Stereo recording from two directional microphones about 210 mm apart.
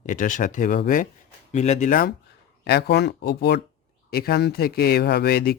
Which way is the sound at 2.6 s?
50° left (ahead or behind).